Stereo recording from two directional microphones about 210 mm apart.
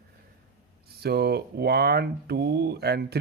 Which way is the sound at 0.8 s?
50° right (ahead or behind).